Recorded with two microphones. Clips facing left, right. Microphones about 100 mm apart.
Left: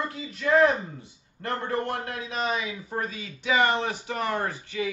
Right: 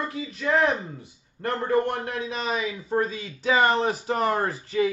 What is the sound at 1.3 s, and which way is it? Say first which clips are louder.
A man's voice: right 5 dB; 30° right (ahead or behind).